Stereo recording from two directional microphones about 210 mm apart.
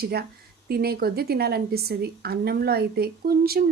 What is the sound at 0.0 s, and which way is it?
A woman's voice, 50° right (ahead or behind).